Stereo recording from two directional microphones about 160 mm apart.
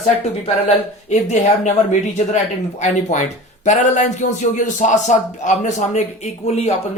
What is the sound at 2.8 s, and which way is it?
A man's voice, 50° left (ahead or behind).